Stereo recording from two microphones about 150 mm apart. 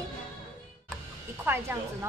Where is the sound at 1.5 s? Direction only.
15° right (ahead or behind).